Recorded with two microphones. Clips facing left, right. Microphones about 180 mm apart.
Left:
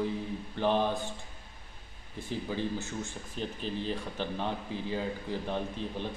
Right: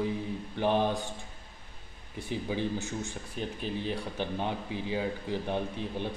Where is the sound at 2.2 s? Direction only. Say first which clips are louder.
Right 2 dB; 15° right (ahead or behind).